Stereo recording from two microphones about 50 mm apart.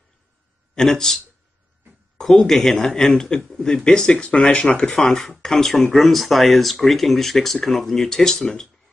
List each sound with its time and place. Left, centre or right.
0.7 s speech: centre